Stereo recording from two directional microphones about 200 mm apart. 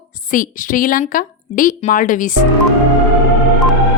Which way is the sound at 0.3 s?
45° left (ahead or behind).